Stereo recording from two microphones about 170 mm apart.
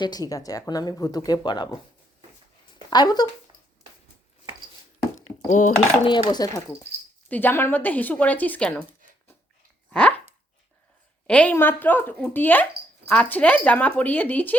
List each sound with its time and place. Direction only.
0.0 s speech: 25° left (ahead or behind)
2.9 s speech: 25° left (ahead or behind)
5.5 s speech: 45° left (ahead or behind)
6.1 s speech: 25° left (ahead or behind)
7.3 s speech: 10° left (ahead or behind)
9.9 s dog: 5° left (ahead or behind)
11.3 s speech: 5° left (ahead or behind)